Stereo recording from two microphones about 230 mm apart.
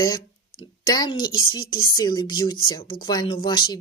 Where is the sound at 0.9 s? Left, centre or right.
Centre.